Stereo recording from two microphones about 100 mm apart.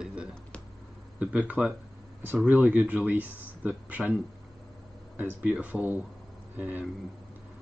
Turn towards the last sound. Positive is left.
turn(degrees=-15)  # may be behind; listen again after turning